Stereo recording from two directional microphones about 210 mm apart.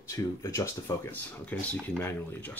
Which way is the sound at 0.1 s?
15° left (ahead or behind).